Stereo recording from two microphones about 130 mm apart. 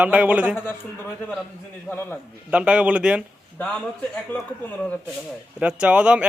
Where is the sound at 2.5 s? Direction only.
10° right (ahead or behind).